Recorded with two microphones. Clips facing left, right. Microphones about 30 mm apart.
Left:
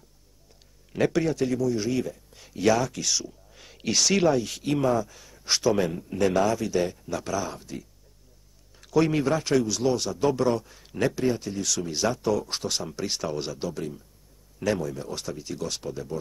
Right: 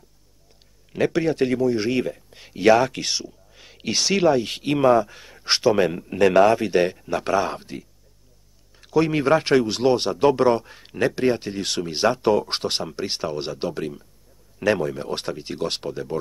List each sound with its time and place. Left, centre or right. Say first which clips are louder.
0.9 s a man's voice: right 2 dB; centre
1.2 s speech: right 5 dB; right
3.3 s speech: right 1 dB; centre
4.4 s speech: right 5 dB; right
6.1 s speech: right 8 dB; right
8.8 s a sound: right 2 dB; centre
9.2 s speech: right 6 dB; right
10.9 s speech: right 3 dB; right
11.1 s speech: right 4 dB; right